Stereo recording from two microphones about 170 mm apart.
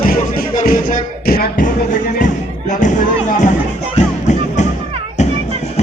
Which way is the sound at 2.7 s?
45° left (ahead or behind).